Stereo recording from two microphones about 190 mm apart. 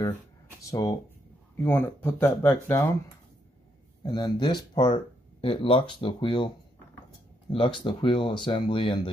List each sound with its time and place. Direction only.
0.7 s speech: 20° left (ahead or behind)
4.0 s speech: 25° left (ahead or behind)
7.5 s speech: 25° left (ahead or behind)